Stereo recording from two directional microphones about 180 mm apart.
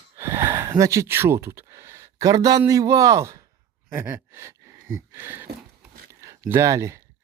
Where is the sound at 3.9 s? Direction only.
15° right (ahead or behind).